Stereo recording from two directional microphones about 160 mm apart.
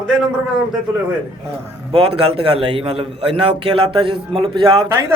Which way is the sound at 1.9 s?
35° right (ahead or behind).